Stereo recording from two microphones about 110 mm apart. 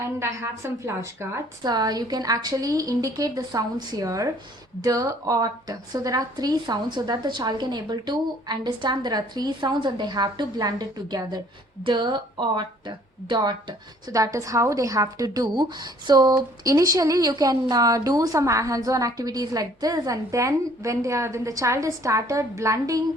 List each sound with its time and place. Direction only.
0.2 s a woman's voice: 25° right (ahead or behind)
1.6 s speech: 35° right (ahead or behind)